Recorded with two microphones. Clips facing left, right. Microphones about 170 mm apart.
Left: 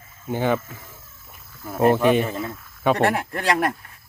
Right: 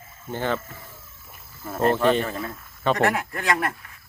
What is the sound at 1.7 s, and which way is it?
Speech, 10° left (ahead or behind).